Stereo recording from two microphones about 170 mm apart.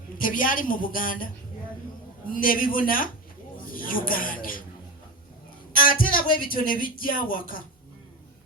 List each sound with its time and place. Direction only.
0.2 s a woman's voice: 50° left (ahead or behind)
2.3 s a woman's voice: 55° left (ahead or behind)
5.7 s speech: 55° left (ahead or behind)